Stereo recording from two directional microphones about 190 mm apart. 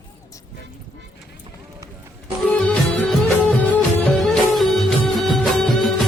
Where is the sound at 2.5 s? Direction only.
5° left (ahead or behind).